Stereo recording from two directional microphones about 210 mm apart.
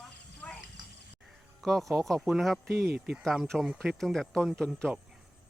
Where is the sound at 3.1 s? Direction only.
Centre (ahead or behind).